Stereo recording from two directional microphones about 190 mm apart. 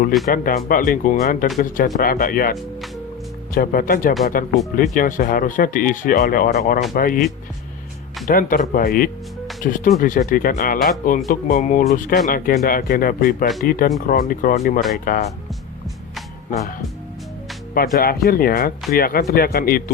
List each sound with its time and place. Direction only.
0.3 s speech: 50° left (ahead or behind)
8.3 s speech: 45° left (ahead or behind)
16.5 s speech: 45° left (ahead or behind)
17.7 s speech: 50° left (ahead or behind)